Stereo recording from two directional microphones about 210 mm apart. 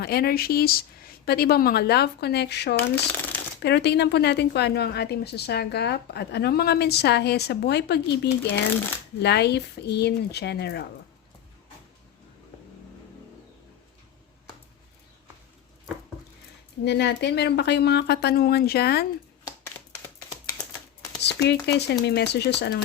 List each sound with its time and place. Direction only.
0.0 s speech: 50° left (ahead or behind)
16.8 s speech: 55° left (ahead or behind)
21.2 s speech: 55° left (ahead or behind)